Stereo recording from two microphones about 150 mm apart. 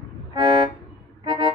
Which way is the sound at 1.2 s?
35° right (ahead or behind).